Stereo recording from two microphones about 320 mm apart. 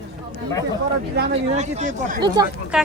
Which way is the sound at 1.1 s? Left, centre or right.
Right.